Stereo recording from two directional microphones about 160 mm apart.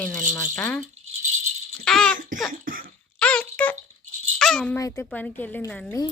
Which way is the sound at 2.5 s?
60° right (ahead or behind).